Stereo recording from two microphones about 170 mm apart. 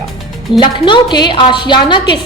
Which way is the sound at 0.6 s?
30° left (ahead or behind).